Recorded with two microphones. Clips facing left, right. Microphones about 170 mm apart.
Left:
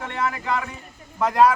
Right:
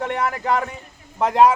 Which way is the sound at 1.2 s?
20° right (ahead or behind).